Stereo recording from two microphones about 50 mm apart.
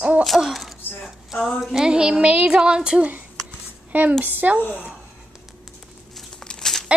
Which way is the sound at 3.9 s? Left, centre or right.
Right.